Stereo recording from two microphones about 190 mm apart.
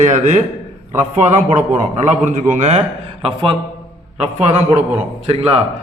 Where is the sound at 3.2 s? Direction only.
25° right (ahead or behind).